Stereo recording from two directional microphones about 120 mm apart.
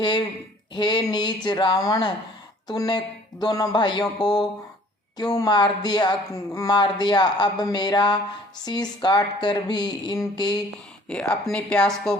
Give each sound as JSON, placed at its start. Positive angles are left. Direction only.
{"t": 0.7, "sound": "a woman's voice", "side_deg": 35}
{"t": 11.1, "sound": "speech", "side_deg": 5}